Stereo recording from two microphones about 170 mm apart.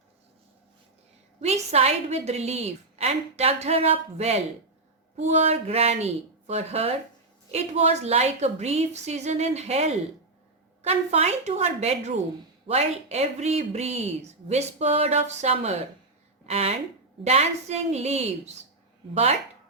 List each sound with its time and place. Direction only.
1.4 s speech: 40° right (ahead or behind)